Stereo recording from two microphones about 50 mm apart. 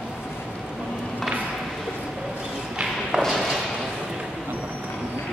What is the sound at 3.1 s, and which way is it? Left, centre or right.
Thump, right.